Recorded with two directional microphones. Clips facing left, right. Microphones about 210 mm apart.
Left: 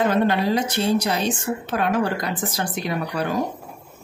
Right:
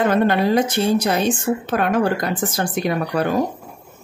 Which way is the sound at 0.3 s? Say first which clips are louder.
Right 4 dB; 55° right (ahead or behind).